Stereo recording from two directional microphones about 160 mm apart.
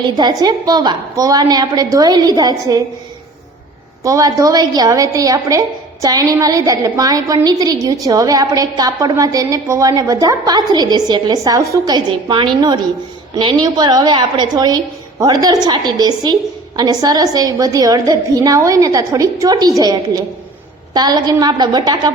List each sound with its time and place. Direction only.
0.0 s a woman's voice: 25° right (ahead or behind)
4.0 s a woman's voice: 20° right (ahead or behind)